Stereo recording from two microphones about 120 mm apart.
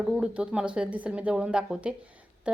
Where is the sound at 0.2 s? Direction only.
10° right (ahead or behind).